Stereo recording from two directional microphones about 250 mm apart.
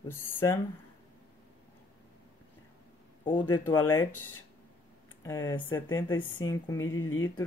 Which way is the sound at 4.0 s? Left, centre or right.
Left.